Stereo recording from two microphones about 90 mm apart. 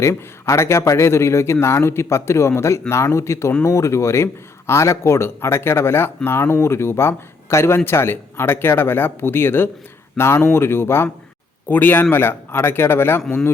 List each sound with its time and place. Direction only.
0.0 s speech: 30° left (ahead or behind)